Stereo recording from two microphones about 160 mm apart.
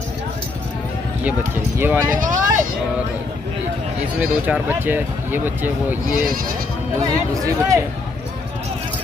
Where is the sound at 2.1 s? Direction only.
55° right (ahead or behind).